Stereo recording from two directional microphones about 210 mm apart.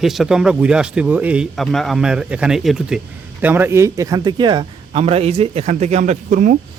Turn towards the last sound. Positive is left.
turn(degrees=-35)  # may be behind; listen again after turning